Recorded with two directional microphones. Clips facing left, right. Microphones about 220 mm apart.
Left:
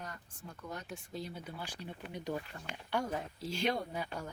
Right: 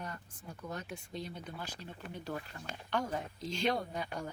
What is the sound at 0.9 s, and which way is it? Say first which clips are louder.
Speech: even; 5° left (ahead or behind).